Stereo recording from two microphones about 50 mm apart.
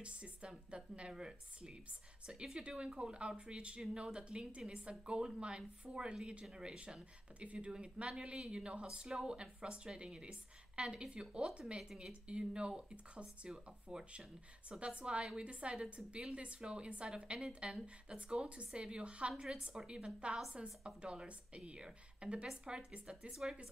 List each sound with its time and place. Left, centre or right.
0.0 s a woman's voice: right
23.3 s a woman's voice: centre